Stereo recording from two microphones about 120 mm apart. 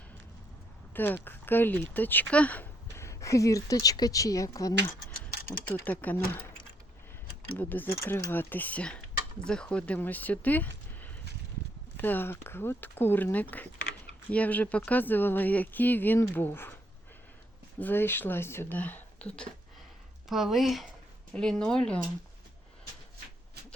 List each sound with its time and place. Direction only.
0.9 s speech: 15° left (ahead or behind)
5.6 s speech: 15° left (ahead or behind)
17.7 s speech: 15° left (ahead or behind)
20.2 s speech: 5° right (ahead or behind)